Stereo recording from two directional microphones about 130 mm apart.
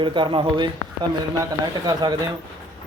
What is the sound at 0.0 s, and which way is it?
Speech, 40° right (ahead or behind).